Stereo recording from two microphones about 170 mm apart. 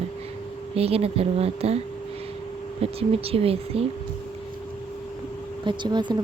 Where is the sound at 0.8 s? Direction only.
35° right (ahead or behind).